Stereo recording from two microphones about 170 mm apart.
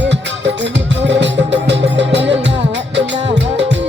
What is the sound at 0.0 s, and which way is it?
Music, 90° right.